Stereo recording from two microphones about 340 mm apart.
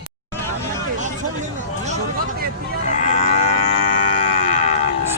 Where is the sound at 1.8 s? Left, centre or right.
Centre.